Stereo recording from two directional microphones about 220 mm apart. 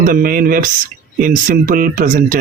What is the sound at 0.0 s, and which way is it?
Speech, 40° right (ahead or behind).